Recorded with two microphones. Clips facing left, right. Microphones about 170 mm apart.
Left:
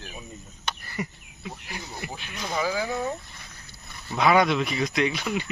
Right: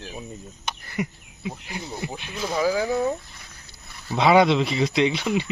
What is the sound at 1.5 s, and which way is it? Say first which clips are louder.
Speech: right 5 dB; 20° right (ahead or behind).